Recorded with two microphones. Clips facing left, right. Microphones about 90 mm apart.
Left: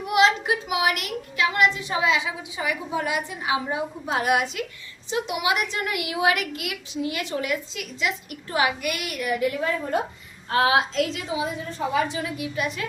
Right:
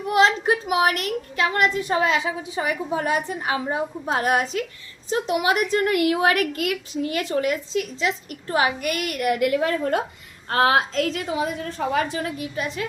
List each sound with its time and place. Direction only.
0.1 s a woman's voice: 40° right (ahead or behind)
9.3 s a woman's voice: 70° right (ahead or behind)
10.5 s a woman's voice: 45° right (ahead or behind)
12.5 s a woman's voice: 30° right (ahead or behind)